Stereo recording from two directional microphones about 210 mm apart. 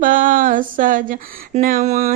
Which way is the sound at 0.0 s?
40° right (ahead or behind).